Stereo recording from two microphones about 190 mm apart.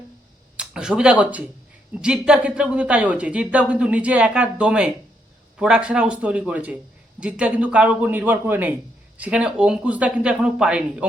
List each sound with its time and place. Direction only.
0.5 s a man's voice: 5° right (ahead or behind)